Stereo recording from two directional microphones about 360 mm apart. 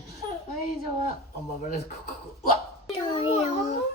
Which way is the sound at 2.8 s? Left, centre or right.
Centre.